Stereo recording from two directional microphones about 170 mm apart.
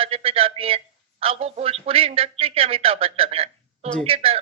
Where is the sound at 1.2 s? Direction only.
35° right (ahead or behind).